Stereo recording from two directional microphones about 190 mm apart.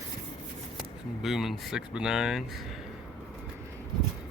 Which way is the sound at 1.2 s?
Centre (ahead or behind).